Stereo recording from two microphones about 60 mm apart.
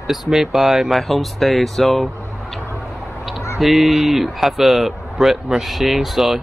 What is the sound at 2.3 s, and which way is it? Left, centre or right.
Vehicle, centre.